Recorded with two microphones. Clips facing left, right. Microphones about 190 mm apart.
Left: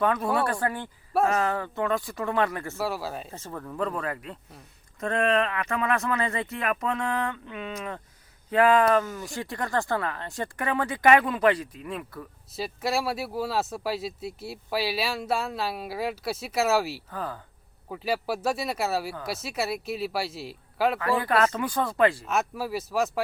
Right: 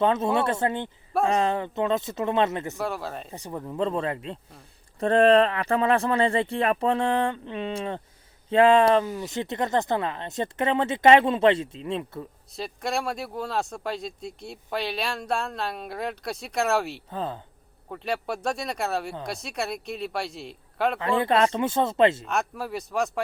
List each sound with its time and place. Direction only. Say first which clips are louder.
0.0 s speech: right 2 dB; 25° right (ahead or behind)
2.7 s speech: even; 5° left (ahead or behind)
3.3 s speech: right 3 dB; 15° right (ahead or behind)
12.5 s speech: left 1 dB; 5° left (ahead or behind)
17.1 s speech: right 3 dB; 25° right (ahead or behind)
17.8 s speech: left 1 dB; 5° left (ahead or behind)
21.0 s speech: right 5 dB; 25° right (ahead or behind)
22.3 s speech: left 1 dB; centre (ahead or behind)